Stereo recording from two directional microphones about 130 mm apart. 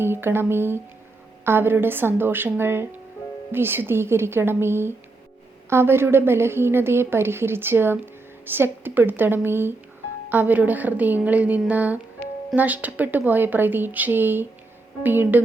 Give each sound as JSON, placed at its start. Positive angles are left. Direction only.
{"t": 0.0, "sound": "a woman's voice", "side_deg": -15}